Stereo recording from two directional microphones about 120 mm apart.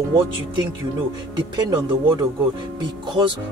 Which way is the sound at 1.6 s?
35° right (ahead or behind).